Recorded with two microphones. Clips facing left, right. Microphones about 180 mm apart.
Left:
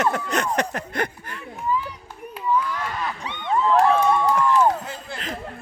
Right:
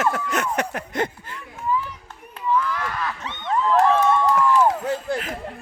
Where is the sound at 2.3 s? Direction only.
15° left (ahead or behind).